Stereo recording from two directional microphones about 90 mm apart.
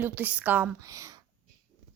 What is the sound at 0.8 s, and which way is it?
Speech, 40° right (ahead or behind).